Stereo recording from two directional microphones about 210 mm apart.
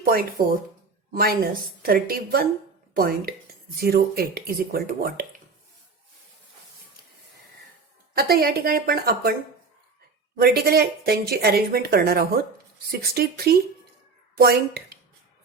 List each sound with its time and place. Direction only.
0.0 s speech: 45° right (ahead or behind)
8.1 s speech: 45° right (ahead or behind)
10.4 s speech: 45° right (ahead or behind)